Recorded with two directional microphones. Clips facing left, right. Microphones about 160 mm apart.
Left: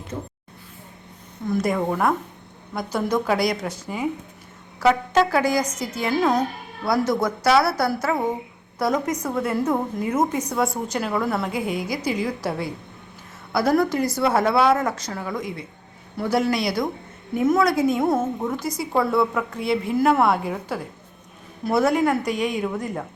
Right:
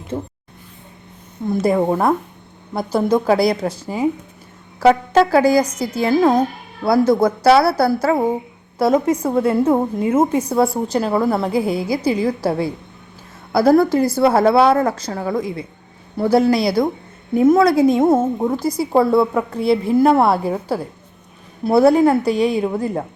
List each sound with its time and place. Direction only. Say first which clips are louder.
0.1 s a woman's voice: right 7 dB; 30° right (ahead or behind)
1.5 s a woman's voice: right 6 dB; 30° right (ahead or behind)